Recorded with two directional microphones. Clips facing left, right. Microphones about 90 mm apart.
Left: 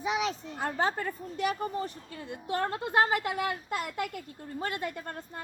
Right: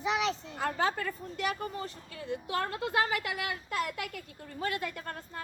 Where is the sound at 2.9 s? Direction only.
35° left (ahead or behind).